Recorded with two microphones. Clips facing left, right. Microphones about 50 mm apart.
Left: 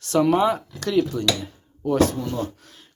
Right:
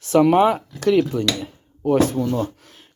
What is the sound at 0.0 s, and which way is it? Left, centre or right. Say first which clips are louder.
Speech: right 4 dB; right.